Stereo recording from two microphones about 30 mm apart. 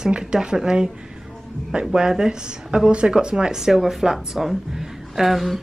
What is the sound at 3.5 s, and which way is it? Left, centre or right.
A woman's voice, centre.